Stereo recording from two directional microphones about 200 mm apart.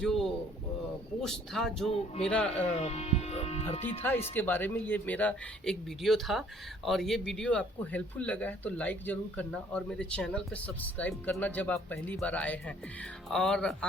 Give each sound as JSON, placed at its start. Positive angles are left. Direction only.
{"t": 0.0, "sound": "speech", "side_deg": 0}
{"t": 2.6, "sound": "speech", "side_deg": 30}
{"t": 4.4, "sound": "speech", "side_deg": 10}